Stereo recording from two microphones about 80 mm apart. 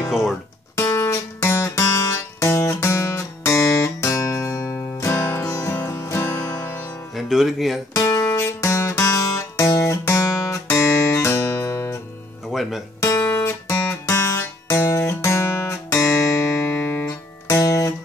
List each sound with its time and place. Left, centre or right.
0.7 s music: left
5.4 s music: left
5.7 s music: left
7.2 s speech: centre
7.9 s guitar: left
12.4 s music: centre
13.2 s guitar: left
14.7 s guitar: left
17.5 s guitar: left